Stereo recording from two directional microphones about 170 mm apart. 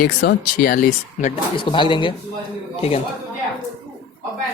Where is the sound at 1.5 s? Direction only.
30° left (ahead or behind).